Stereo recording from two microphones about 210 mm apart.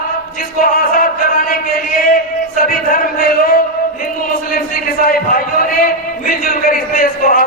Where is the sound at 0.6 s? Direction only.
45° left (ahead or behind).